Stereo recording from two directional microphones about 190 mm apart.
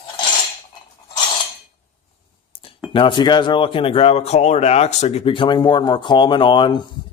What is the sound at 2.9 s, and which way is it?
Speech, 25° left (ahead or behind).